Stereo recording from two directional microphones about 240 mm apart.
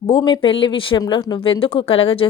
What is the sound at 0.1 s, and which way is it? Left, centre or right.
Speech, centre.